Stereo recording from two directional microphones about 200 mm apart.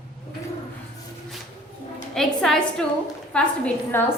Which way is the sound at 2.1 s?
5° left (ahead or behind).